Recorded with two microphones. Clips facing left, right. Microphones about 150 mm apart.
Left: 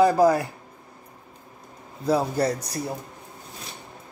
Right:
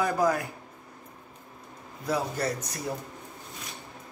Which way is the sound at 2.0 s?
30° left (ahead or behind).